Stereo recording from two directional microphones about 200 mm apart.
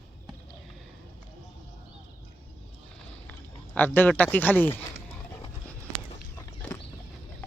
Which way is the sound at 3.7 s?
10° left (ahead or behind).